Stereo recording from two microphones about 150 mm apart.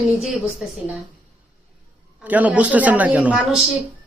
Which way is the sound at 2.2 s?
10° right (ahead or behind).